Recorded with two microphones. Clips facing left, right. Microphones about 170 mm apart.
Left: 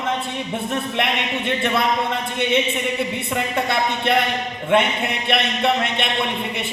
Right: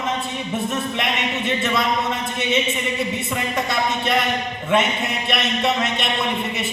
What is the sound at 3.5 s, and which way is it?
Speech, 60° left (ahead or behind).